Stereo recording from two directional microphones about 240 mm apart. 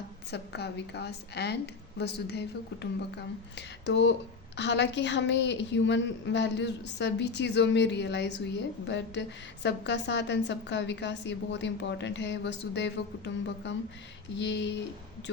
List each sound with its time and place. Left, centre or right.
0.3 s a woman's voice: left
3.8 s a woman's voice: left